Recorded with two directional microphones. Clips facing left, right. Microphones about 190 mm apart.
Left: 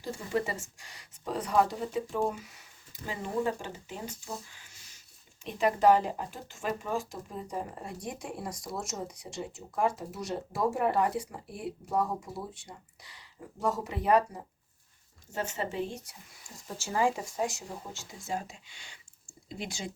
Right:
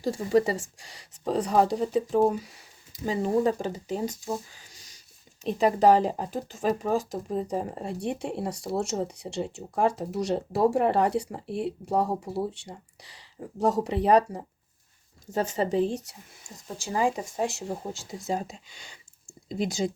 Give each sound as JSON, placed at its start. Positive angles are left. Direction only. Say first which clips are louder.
{"t": 0.1, "sound": "speech", "louder": "right 8 dB", "side_deg": -35}
{"t": 5.4, "sound": "speech", "louder": "right 4 dB", "side_deg": -35}
{"t": 15.4, "sound": "speech", "louder": "right 8 dB", "side_deg": -35}
{"t": 16.6, "sound": "speech", "louder": "right 2 dB", "side_deg": -15}
{"t": 17.7, "sound": "speech", "louder": "right 9 dB", "side_deg": -35}